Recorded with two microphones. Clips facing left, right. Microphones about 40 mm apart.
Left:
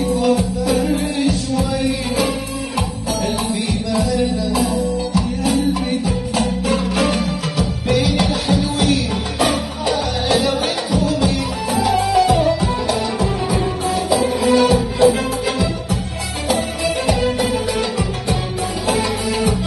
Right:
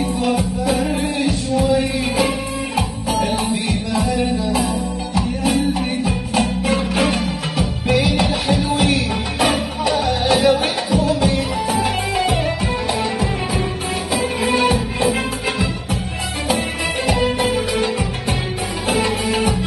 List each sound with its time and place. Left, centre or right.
0.0 s music: right
14.1 s music: right
16.4 s music: right
18.9 s music: right